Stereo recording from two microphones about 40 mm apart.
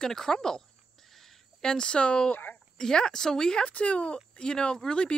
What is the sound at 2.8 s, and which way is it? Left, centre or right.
Speech, centre.